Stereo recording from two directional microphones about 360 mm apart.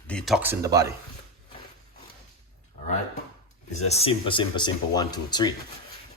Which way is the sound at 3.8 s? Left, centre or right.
Centre.